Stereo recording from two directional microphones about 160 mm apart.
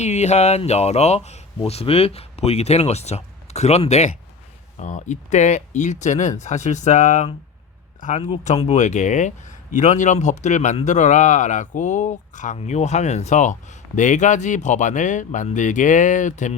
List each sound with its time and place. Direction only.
0.0 s a man's voice: 45° left (ahead or behind)